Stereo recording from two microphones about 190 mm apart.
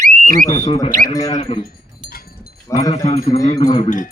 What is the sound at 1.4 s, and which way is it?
Speech, 30° left (ahead or behind).